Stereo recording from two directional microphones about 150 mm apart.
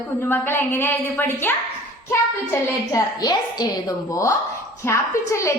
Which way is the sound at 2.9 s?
25° left (ahead or behind).